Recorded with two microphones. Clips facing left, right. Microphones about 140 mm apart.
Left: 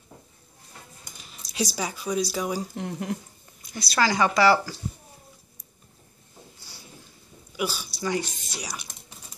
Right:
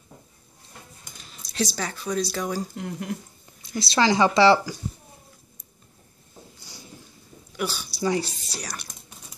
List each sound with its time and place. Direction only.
1.1 s a sound: 5° left (ahead or behind)
2.3 s speech: 5° left (ahead or behind)
2.7 s speech: 30° left (ahead or behind)
3.6 s speech: 25° right (ahead or behind)
7.5 s a woman's voice: 5° left (ahead or behind)
8.0 s speech: 35° right (ahead or behind)
8.5 s speech: 5° left (ahead or behind)